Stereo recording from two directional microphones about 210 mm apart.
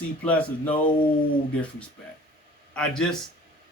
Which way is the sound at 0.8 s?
25° left (ahead or behind).